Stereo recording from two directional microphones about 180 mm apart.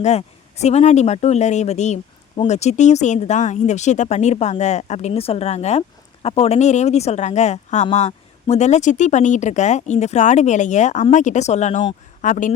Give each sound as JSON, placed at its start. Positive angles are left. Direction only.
{"t": 0.0, "sound": "speech", "side_deg": 35}